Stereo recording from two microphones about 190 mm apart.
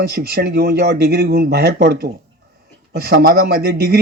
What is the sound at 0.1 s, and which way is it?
Speech, 60° right (ahead or behind).